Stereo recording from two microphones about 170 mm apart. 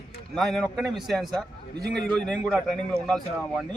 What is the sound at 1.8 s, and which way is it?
Speech, 70° right (ahead or behind).